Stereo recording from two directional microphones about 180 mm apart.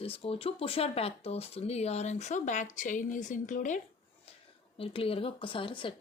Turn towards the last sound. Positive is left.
turn(degrees=30)  # may be behind; listen again after turning